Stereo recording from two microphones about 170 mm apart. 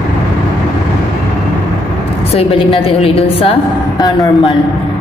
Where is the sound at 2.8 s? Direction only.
35° left (ahead or behind).